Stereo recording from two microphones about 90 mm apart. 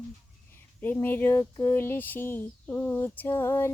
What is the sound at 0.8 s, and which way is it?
Speech, 20° left (ahead or behind).